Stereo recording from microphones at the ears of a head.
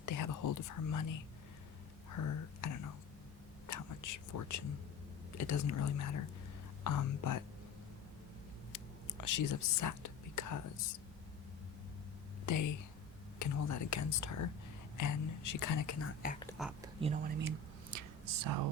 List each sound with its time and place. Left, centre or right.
0.0 s whispering: left
5.3 s speech: left
8.7 s whispering: left
12.5 s speech: left
17.1 s speech: right